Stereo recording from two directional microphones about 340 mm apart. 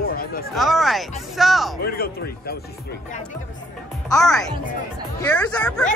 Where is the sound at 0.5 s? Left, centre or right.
Centre.